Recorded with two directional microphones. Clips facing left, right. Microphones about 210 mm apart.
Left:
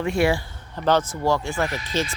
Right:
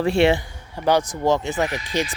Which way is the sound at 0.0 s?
30° right (ahead or behind).